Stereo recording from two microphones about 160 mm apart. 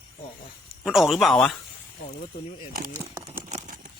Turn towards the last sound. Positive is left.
turn(degrees=-45)  # may be behind; listen again after turning